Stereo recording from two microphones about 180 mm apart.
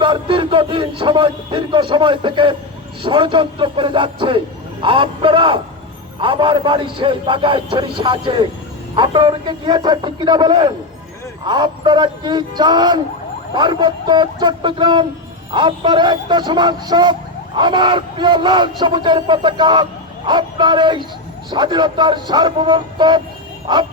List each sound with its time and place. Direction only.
0.0 s a man's voice: 30° right (ahead or behind)